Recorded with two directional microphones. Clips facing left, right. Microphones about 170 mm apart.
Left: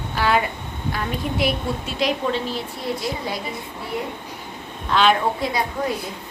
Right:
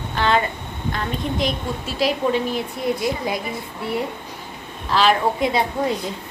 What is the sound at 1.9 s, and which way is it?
Speech, 5° right (ahead or behind).